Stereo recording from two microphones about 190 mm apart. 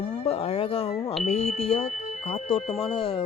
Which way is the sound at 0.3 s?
30° left (ahead or behind).